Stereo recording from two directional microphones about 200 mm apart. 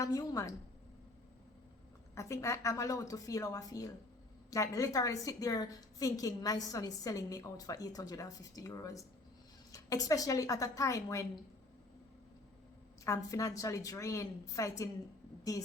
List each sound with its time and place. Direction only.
0.0 s a woman's voice: 15° left (ahead or behind)
2.1 s a woman's voice: 15° left (ahead or behind)
13.1 s a woman's voice: 15° left (ahead or behind)